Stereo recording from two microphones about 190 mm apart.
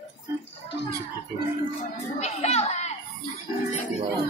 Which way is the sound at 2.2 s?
35° left (ahead or behind).